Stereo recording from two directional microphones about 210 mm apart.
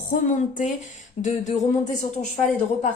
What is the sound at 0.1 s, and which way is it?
A woman's voice, 35° left (ahead or behind).